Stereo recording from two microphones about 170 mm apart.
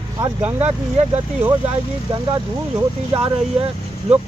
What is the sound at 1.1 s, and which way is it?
Speech, 10° right (ahead or behind).